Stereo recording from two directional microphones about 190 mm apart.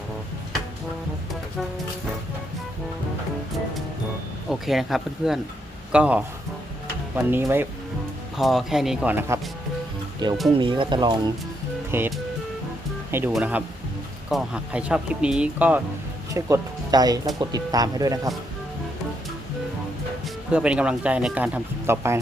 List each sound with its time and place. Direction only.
4.4 s speech: centre (ahead or behind)
8.4 s speech: centre (ahead or behind)
10.2 s speech: 25° right (ahead or behind)
11.9 s speech: 10° right (ahead or behind)
16.3 s speech: 20° right (ahead or behind)
20.5 s speech: 5° right (ahead or behind)